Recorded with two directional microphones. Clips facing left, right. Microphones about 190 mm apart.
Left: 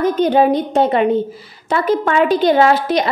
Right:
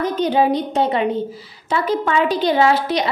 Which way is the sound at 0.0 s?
50° left (ahead or behind).